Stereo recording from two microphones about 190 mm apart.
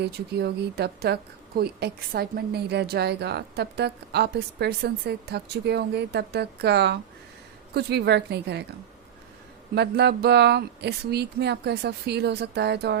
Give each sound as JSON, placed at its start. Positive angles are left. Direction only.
{"t": 0.0, "sound": "a woman's voice", "side_deg": -60}
{"t": 9.7, "sound": "a woman's voice", "side_deg": -60}